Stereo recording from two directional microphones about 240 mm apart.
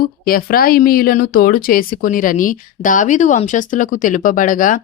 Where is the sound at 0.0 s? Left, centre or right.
Left.